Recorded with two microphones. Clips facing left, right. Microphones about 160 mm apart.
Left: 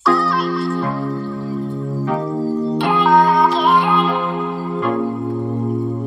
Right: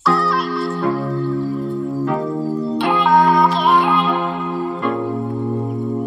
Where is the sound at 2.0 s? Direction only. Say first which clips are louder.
Left 3 dB; centre (ahead or behind).